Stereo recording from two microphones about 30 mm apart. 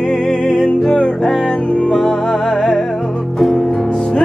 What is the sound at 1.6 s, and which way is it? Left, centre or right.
Music, left.